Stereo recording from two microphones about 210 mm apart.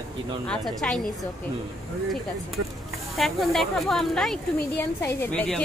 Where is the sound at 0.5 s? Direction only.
Centre (ahead or behind).